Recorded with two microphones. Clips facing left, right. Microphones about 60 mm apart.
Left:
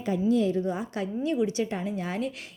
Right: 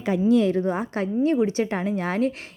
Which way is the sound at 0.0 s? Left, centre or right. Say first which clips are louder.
Right 5 dB; right.